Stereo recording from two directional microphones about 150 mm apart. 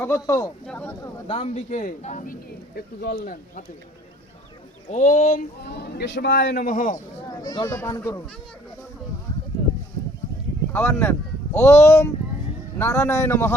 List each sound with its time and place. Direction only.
0.0 s speech: 20° left (ahead or behind)
0.6 s speech: 5° left (ahead or behind)
1.3 s speech: 45° left (ahead or behind); by 3.6 s 80° left
4.9 s speech: 55° left (ahead or behind)
5.6 s a man's voice: 90° left; by 7.0 s 60° left (ahead or behind)
7.3 s speech: 25° left (ahead or behind)
10.7 s speech: 15° left (ahead or behind)